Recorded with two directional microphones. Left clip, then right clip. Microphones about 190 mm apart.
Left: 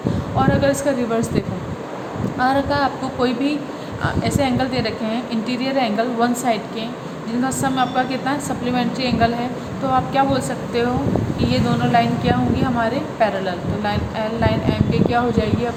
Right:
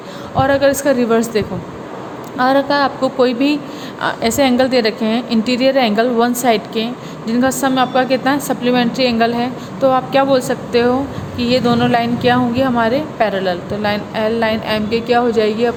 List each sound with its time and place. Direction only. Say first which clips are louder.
0.3 s a woman's voice: right 5 dB; 45° right (ahead or behind)